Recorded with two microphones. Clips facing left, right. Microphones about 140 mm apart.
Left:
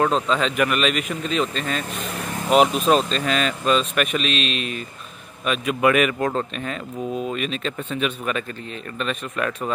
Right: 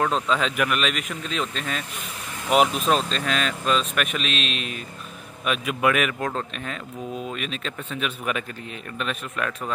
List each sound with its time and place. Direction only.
0.0 s speech: centre (ahead or behind)